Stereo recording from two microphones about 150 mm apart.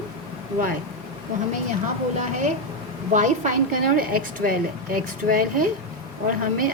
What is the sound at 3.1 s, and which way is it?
A woman's voice, 55° right (ahead or behind).